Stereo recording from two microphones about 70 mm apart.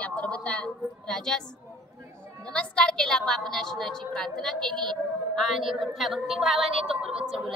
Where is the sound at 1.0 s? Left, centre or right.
Centre.